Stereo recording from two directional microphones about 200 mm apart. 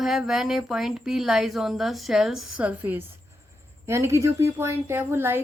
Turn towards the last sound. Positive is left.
turn(degrees=-10)  # may be behind; listen again after turning